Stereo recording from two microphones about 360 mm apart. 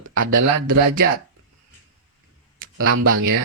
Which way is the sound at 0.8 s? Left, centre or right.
Right.